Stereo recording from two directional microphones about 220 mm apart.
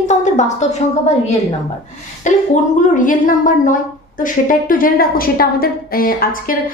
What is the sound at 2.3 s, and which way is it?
A woman's voice, 35° left (ahead or behind).